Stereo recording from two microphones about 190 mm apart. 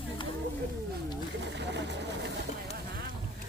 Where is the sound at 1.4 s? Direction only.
65° right (ahead or behind).